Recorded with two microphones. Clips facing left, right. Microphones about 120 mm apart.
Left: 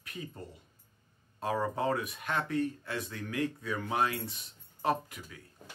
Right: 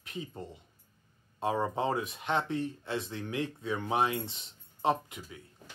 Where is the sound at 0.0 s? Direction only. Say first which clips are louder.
Right 2 dB; 25° right (ahead or behind).